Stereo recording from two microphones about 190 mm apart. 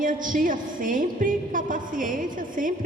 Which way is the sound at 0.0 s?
45° right (ahead or behind).